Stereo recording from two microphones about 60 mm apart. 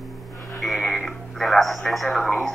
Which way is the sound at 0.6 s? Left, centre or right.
Centre.